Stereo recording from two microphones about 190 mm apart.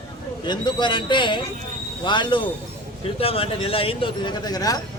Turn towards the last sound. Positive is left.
turn(degrees=20)  # may be behind; listen again after turning